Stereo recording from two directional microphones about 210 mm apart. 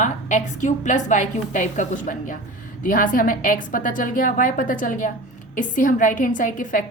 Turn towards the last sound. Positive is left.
turn(degrees=40)  # may be behind; listen again after turning